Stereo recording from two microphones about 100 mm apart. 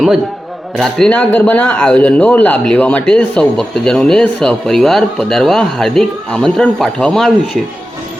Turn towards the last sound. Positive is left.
turn(degrees=5)  # may be behind; listen again after turning